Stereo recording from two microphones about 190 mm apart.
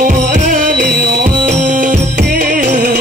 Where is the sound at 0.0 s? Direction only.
45° right (ahead or behind).